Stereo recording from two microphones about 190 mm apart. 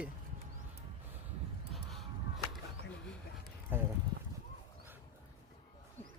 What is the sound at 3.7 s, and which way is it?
Speech, 10° right (ahead or behind).